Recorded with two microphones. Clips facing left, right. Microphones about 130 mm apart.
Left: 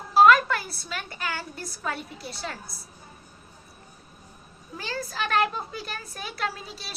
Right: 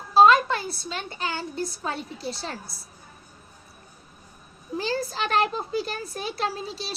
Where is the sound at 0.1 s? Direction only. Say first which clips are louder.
Right 1 dB; 20° right (ahead or behind).